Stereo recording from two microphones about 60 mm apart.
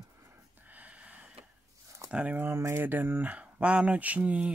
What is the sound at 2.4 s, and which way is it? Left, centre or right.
Speech, right.